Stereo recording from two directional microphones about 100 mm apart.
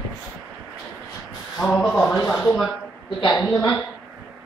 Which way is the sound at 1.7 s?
10° left (ahead or behind).